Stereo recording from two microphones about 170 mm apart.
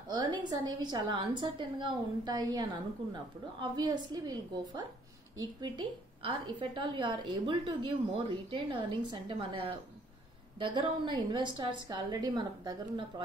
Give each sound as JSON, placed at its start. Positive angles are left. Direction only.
{"t": 0.1, "sound": "a woman's voice", "side_deg": -25}